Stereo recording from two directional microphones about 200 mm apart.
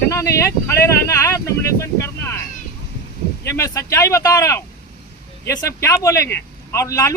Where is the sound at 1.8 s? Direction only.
15° left (ahead or behind).